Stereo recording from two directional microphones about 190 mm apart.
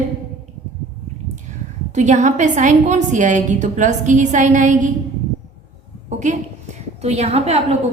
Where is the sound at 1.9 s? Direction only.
40° right (ahead or behind).